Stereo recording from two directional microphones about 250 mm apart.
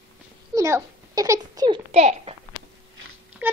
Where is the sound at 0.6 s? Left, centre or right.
Centre.